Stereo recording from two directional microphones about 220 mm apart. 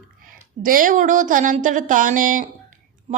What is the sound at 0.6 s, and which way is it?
A woman's voice, 40° right (ahead or behind).